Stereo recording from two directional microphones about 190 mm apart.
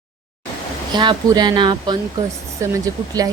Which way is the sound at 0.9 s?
20° right (ahead or behind).